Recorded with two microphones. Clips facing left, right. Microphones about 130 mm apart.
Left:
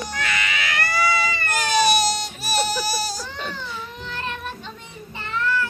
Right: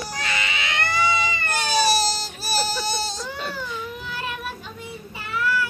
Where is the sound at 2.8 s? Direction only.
25° right (ahead or behind).